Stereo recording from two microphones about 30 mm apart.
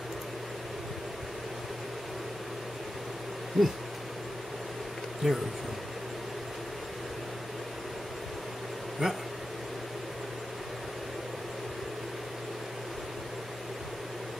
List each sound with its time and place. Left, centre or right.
3.6 s owl: centre
5.2 s speech: centre
9.0 s speech: centre